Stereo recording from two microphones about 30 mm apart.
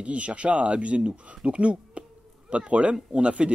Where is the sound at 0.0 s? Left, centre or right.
Right.